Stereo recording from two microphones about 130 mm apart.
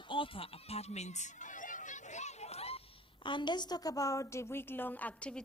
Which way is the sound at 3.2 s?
35° left (ahead or behind).